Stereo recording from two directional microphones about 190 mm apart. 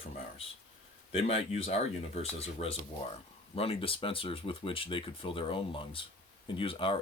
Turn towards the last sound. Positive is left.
turn(degrees=30)  # may be behind; listen again after turning